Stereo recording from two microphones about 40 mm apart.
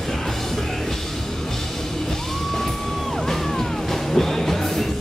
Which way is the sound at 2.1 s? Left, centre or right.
Centre.